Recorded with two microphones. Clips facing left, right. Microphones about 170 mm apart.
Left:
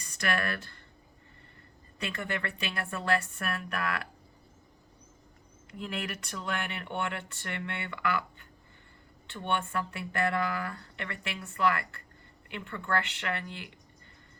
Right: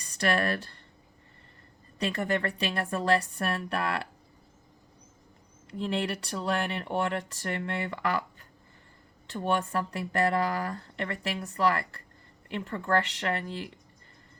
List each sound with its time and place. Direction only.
0.0 s speech: 35° right (ahead or behind)
2.0 s speech: 35° right (ahead or behind)
5.7 s speech: 30° right (ahead or behind)